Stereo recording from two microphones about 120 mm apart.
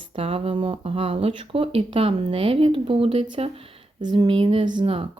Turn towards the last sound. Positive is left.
turn(degrees=-45)  # may be behind; listen again after turning